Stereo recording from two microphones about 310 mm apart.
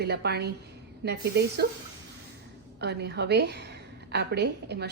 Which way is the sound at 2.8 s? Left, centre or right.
Right.